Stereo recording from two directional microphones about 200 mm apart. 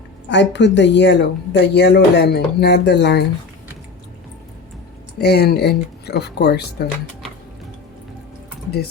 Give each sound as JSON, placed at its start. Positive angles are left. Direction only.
{"t": 0.3, "sound": "speech", "side_deg": 60}
{"t": 5.1, "sound": "speech", "side_deg": 55}